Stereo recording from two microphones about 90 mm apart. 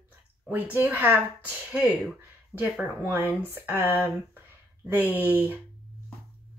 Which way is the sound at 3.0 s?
30° right (ahead or behind).